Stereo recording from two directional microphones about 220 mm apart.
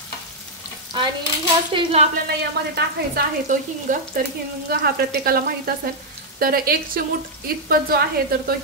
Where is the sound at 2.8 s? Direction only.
40° right (ahead or behind).